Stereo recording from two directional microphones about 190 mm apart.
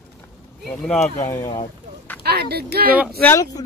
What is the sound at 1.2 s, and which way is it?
Speech, 15° left (ahead or behind).